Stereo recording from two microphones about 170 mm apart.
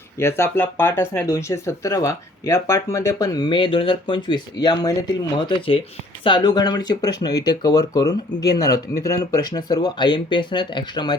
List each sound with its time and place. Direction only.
0.2 s speech: 15° left (ahead or behind)